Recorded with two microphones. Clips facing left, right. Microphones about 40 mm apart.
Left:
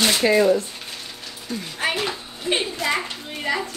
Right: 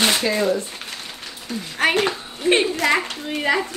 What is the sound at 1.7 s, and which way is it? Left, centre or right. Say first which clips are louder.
A woman's voice: right 6 dB; right.